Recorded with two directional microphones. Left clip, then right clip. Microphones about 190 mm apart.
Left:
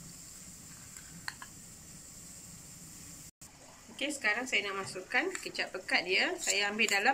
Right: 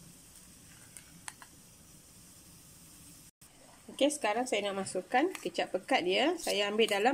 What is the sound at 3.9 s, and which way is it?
Speech, 45° right (ahead or behind).